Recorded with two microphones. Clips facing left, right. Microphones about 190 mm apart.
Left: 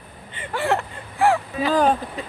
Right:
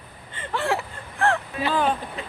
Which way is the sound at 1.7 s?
40° left (ahead or behind).